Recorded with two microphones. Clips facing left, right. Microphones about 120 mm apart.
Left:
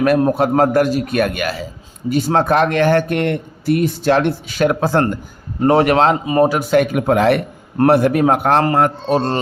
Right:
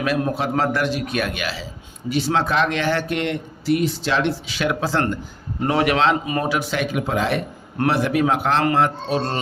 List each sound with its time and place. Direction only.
0.0 s speech: 50° left (ahead or behind)
6.2 s speech: 30° left (ahead or behind)
6.5 s speech: 45° left (ahead or behind)
7.8 s speech: 50° left (ahead or behind)